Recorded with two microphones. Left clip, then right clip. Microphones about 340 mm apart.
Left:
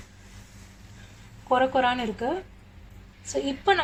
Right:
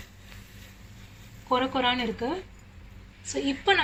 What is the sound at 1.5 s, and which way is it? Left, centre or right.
A woman's voice, centre.